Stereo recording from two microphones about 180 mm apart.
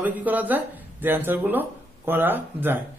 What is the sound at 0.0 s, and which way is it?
A man's voice, 10° right (ahead or behind).